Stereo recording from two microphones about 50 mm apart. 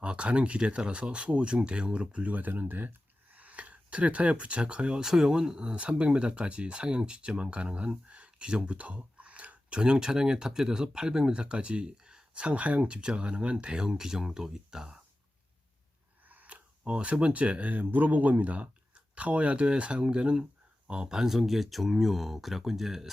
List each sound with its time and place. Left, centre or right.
0.0 s speech: right
5.0 s speech: centre
16.3 s speech: right
21.2 s speech: centre